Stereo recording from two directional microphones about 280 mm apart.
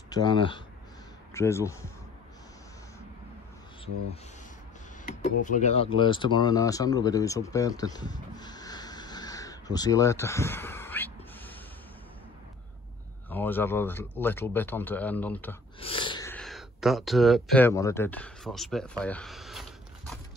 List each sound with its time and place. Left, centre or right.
0.1 s speech: centre
5.0 s speech: left; by 11.5 s centre
13.3 s speech: centre
15.8 s speech: centre